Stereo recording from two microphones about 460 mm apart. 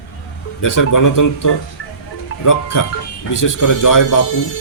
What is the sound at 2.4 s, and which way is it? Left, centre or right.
Speech, left.